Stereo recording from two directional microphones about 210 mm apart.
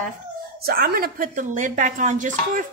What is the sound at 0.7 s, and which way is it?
Speech, 45° right (ahead or behind).